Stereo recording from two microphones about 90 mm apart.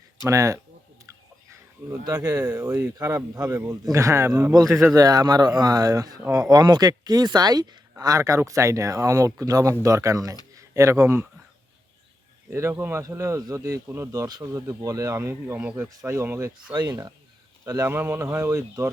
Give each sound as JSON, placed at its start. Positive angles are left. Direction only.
{"t": 0.3, "sound": "speech", "side_deg": -35}
{"t": 2.0, "sound": "speech", "side_deg": -45}
{"t": 2.6, "sound": "speech", "side_deg": -30}
{"t": 12.5, "sound": "speech", "side_deg": -30}
{"t": 14.4, "sound": "speech", "side_deg": -35}
{"t": 16.7, "sound": "speech", "side_deg": -45}
{"t": 17.9, "sound": "speech", "side_deg": -25}